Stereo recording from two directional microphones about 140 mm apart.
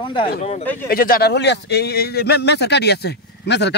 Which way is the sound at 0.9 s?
90° left.